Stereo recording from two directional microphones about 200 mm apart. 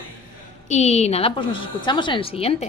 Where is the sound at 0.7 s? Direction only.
35° left (ahead or behind).